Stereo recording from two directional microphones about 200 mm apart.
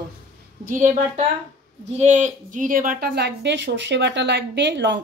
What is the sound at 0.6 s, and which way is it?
A woman's voice, 40° right (ahead or behind).